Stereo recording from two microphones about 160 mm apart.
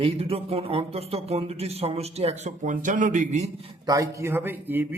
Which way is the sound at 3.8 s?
20° right (ahead or behind).